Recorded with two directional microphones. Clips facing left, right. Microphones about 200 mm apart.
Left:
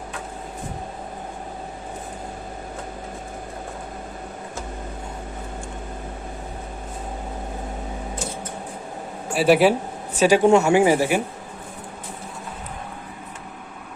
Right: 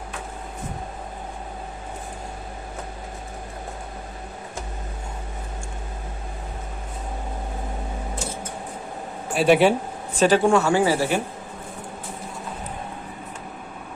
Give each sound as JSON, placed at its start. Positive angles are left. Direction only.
{"t": 9.3, "sound": "a woman's voice", "side_deg": 5}
{"t": 10.4, "sound": "a woman's voice", "side_deg": 20}